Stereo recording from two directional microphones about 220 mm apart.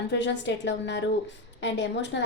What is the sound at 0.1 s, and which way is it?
A woman's voice, 55° left (ahead or behind).